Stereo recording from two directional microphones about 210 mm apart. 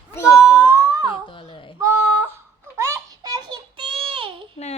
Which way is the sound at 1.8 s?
15° right (ahead or behind).